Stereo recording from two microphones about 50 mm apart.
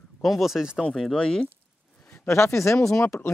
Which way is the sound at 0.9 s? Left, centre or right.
Centre.